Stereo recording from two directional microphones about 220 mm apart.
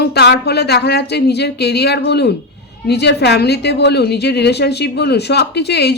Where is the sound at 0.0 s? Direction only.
45° left (ahead or behind).